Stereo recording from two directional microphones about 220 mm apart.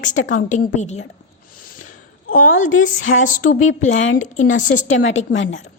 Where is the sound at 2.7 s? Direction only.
65° left (ahead or behind).